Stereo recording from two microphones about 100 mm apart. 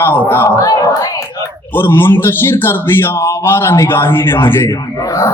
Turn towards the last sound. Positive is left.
turn(degrees=35)  # may be behind; listen again after turning